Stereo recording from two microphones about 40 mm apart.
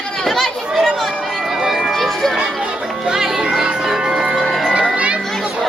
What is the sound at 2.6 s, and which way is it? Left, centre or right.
Music, right.